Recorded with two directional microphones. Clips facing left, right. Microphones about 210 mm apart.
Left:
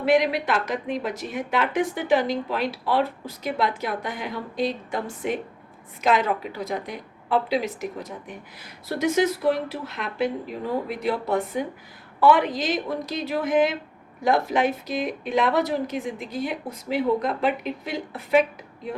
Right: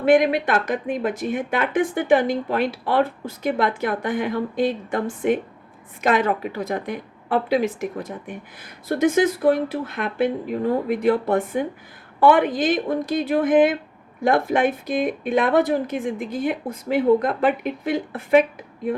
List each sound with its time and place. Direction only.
0.0 s a woman's voice: 50° right (ahead or behind)